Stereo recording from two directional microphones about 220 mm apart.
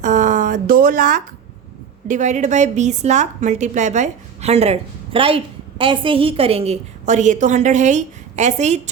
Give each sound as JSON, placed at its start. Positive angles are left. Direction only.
{"t": 0.0, "sound": "a woman's voice", "side_deg": -35}